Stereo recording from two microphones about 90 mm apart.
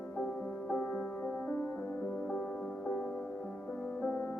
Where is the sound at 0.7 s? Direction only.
15° left (ahead or behind).